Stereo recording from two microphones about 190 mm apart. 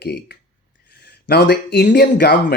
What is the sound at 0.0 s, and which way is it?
Speech, 60° left (ahead or behind).